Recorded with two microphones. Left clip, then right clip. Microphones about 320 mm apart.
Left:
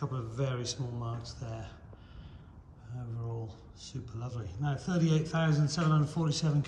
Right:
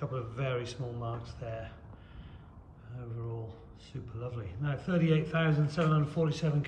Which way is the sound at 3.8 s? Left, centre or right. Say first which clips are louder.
Right 2 dB; centre.